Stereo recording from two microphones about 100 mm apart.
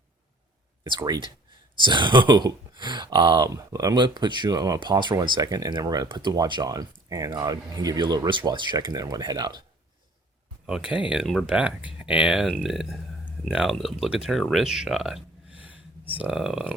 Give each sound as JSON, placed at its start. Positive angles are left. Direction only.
{"t": 0.9, "sound": "speech", "side_deg": -45}
{"t": 4.8, "sound": "speech", "side_deg": -50}
{"t": 10.7, "sound": "speech", "side_deg": -10}
{"t": 15.5, "sound": "a sound", "side_deg": -15}